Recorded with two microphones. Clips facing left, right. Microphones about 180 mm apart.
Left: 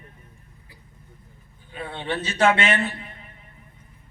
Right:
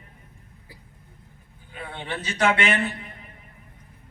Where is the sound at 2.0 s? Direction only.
25° left (ahead or behind).